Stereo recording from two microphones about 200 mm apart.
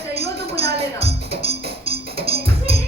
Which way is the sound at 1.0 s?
30° right (ahead or behind).